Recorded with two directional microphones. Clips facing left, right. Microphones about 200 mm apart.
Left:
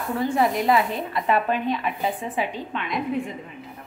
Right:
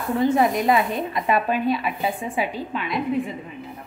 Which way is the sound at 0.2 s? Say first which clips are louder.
Right 3 dB; 20° right (ahead or behind).